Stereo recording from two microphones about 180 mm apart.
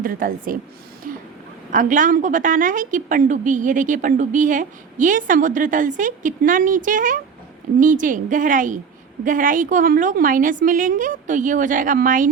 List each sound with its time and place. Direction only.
0.0 s a woman's voice: 50° right (ahead or behind)
1.0 s vehicle: 50° right (ahead or behind)
1.7 s a woman's voice: 45° right (ahead or behind)